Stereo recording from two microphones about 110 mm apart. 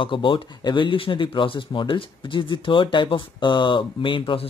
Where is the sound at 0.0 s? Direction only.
50° left (ahead or behind).